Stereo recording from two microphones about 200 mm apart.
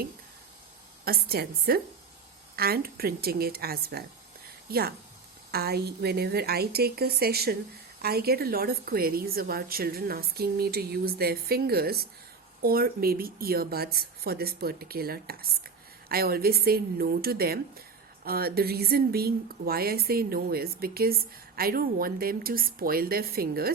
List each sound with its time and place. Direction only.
1.0 s speech: 50° right (ahead or behind)